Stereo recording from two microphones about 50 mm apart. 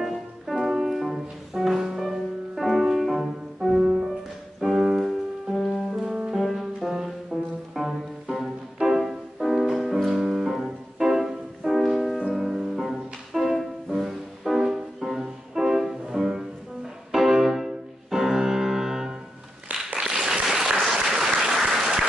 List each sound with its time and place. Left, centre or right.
0.1 s music: centre
3.8 s music: right
4.6 s music: centre
5.6 s music: centre
20.0 s a sound: centre
20.8 s applause: centre